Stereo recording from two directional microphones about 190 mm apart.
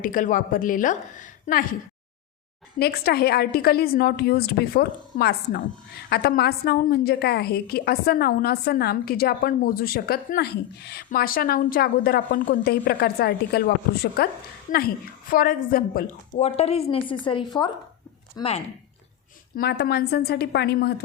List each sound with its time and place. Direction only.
0.0 s a woman's voice: 45° left (ahead or behind)
2.7 s a woman's voice: 55° left (ahead or behind)
16.4 s speech: 35° left (ahead or behind)
19.5 s a woman's voice: 60° left (ahead or behind)